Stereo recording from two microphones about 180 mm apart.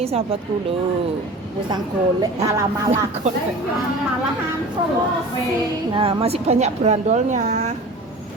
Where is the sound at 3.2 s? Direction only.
40° right (ahead or behind).